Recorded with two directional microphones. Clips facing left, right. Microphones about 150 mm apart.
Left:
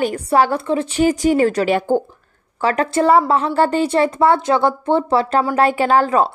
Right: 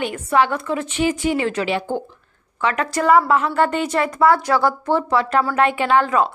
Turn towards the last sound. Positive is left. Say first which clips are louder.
# left 2 dB
turn(degrees=35)  # may be behind; listen again after turning